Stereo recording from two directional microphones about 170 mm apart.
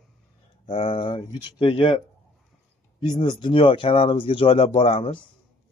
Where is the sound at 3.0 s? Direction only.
25° left (ahead or behind).